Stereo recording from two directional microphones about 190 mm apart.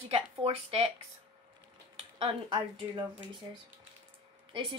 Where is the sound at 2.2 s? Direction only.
25° right (ahead or behind).